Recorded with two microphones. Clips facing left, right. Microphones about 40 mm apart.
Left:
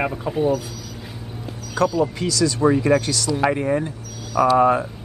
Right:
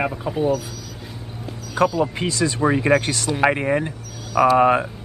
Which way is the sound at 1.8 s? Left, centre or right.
Right.